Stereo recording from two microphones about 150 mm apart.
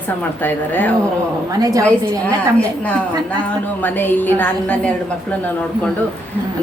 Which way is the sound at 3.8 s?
15° left (ahead or behind).